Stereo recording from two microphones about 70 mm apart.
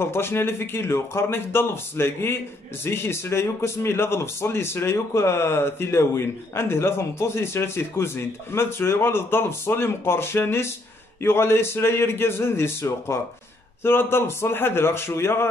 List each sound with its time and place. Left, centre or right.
0.0 s a man's voice: left